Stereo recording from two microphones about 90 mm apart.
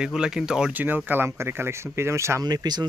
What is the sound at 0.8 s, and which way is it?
Speech, 20° right (ahead or behind).